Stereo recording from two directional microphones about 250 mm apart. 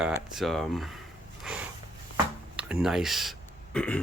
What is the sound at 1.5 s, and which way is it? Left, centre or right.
Snort, centre.